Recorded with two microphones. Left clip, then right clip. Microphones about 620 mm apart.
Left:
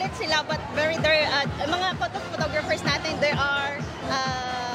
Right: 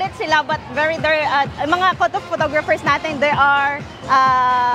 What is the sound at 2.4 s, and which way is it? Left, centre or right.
Speech, right.